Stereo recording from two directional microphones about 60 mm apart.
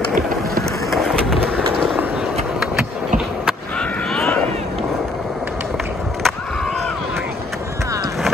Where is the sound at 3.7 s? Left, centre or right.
Centre.